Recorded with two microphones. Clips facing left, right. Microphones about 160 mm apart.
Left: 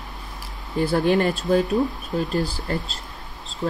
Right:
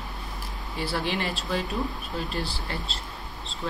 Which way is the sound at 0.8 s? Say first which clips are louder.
Left 10 dB; 45° left (ahead or behind).